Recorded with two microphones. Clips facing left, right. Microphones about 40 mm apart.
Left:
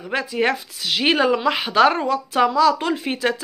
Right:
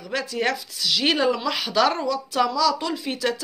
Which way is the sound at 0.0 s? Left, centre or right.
Left.